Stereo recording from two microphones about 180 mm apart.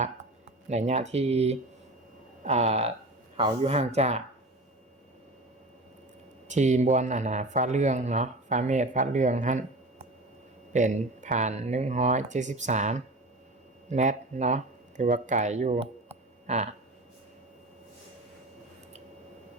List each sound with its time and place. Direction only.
0.7 s speech: 40° right (ahead or behind)
6.5 s speech: 40° right (ahead or behind)
10.7 s speech: 45° right (ahead or behind)